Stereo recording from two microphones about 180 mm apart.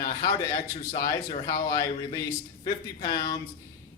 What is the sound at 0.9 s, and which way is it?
Speech, 30° left (ahead or behind).